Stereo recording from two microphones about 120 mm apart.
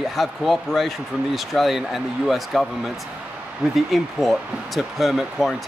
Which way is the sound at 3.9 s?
Centre (ahead or behind).